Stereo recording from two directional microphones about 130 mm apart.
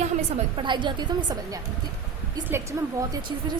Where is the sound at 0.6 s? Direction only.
35° right (ahead or behind).